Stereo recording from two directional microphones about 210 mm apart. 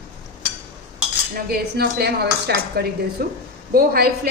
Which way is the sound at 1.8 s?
50° right (ahead or behind).